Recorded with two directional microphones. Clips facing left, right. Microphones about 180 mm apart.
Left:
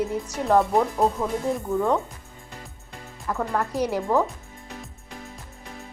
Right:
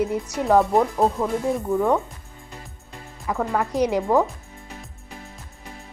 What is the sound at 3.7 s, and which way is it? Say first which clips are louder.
Speech: right 4 dB; 15° right (ahead or behind).